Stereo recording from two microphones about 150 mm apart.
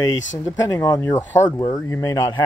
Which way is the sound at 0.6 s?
25° left (ahead or behind).